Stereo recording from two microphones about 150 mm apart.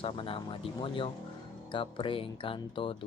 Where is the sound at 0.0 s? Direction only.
35° left (ahead or behind).